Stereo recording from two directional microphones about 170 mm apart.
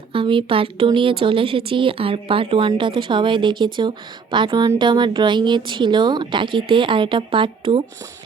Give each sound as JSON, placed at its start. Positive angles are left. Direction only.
{"t": 0.1, "sound": "speech", "side_deg": -30}